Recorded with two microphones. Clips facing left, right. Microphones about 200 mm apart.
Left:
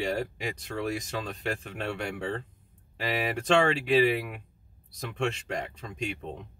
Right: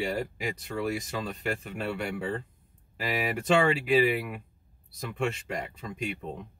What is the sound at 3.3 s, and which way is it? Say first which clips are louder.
Speech: even; 5° right (ahead or behind).